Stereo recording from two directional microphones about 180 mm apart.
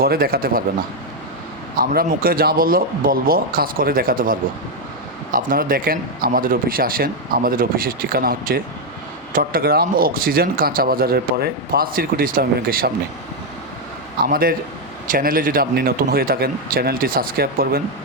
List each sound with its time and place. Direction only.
0.0 s speech: 55° right (ahead or behind)
1.7 s speech: 55° right (ahead or behind)
14.3 s speech: 55° right (ahead or behind)